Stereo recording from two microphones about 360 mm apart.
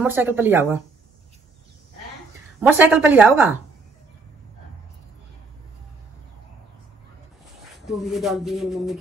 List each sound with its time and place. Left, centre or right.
0.0 s speech: centre
2.6 s speech: centre
7.8 s speech: centre